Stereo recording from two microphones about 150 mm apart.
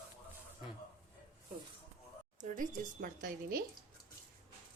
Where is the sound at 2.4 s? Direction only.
60° right (ahead or behind).